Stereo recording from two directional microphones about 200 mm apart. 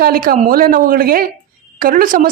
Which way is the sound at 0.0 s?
45° right (ahead or behind).